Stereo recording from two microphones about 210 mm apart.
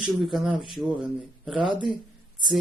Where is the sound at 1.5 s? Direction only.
25° right (ahead or behind).